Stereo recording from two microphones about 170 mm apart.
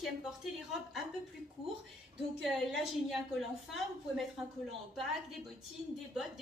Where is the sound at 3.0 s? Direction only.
Centre (ahead or behind).